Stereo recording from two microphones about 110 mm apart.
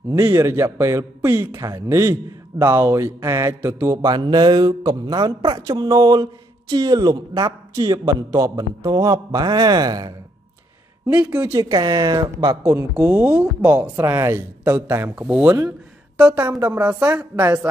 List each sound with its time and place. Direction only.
0.1 s speech: 25° right (ahead or behind)
4.1 s a man's voice: 40° right (ahead or behind)
7.4 s a man's voice: 30° right (ahead or behind)
11.1 s speech: 10° right (ahead or behind)
11.5 s a man's voice: 30° right (ahead or behind)
12.7 s speech: 20° right (ahead or behind)
15.1 s speech: 10° right (ahead or behind)